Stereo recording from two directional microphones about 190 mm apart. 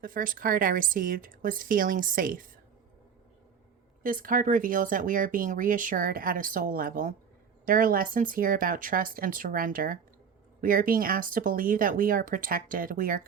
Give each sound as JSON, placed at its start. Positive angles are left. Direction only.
{"t": 0.0, "sound": "speech", "side_deg": -45}
{"t": 4.0, "sound": "speech", "side_deg": -45}